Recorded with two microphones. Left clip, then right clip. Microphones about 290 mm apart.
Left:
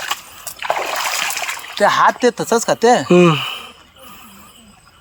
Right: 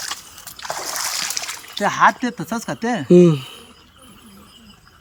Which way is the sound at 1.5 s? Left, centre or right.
Left.